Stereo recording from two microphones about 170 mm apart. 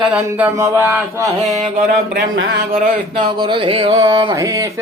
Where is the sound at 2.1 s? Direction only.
65° right (ahead or behind).